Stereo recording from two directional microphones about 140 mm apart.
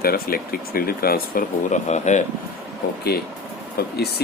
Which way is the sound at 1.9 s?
55° left (ahead or behind).